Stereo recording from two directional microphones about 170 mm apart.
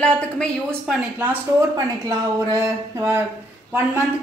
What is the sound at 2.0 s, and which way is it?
Speech, 20° right (ahead or behind).